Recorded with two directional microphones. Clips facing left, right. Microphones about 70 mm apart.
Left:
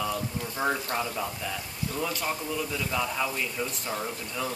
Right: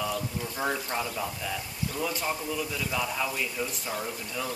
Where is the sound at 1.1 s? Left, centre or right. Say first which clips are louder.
Even; centre.